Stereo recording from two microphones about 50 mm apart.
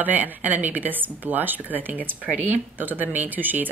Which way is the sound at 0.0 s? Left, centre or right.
Right.